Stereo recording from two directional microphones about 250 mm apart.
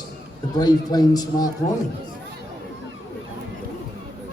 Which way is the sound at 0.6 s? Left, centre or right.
Centre.